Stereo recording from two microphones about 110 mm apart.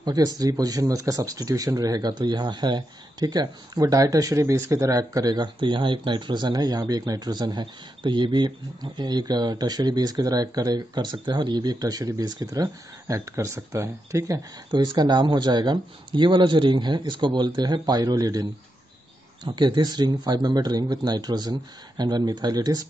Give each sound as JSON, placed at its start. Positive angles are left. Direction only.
{"t": 0.0, "sound": "speech", "side_deg": -35}
{"t": 19.4, "sound": "speech", "side_deg": -45}